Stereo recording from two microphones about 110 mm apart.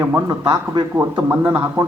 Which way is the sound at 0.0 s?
30° right (ahead or behind).